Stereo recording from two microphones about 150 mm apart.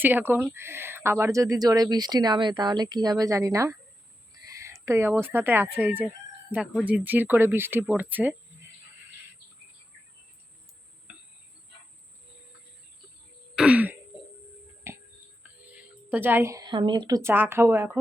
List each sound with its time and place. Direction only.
0.0 s speech: 15° right (ahead or behind)
13.6 s throat clearing: 10° right (ahead or behind)
14.9 s a sound: 15° right (ahead or behind)
15.4 s a woman's voice: 10° right (ahead or behind)